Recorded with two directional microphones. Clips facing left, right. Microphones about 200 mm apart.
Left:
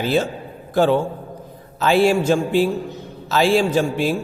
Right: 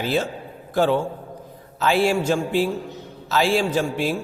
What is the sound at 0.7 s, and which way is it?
A man's voice, 25° left (ahead or behind).